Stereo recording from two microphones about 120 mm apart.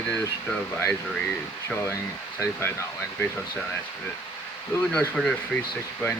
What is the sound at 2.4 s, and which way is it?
Speech, 25° left (ahead or behind).